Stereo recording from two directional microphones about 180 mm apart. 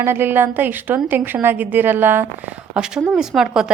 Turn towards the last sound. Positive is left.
turn(degrees=-5)  # may be behind; listen again after turning